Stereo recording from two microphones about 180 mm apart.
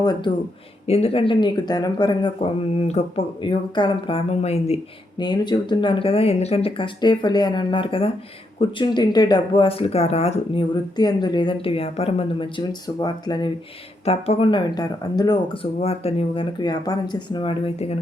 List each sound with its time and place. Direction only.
0.0 s speech: 25° left (ahead or behind)
0.9 s speech: 35° left (ahead or behind)
10.9 s speech: 25° left (ahead or behind)
14.0 s speech: 35° left (ahead or behind)
15.8 s speech: 35° left (ahead or behind)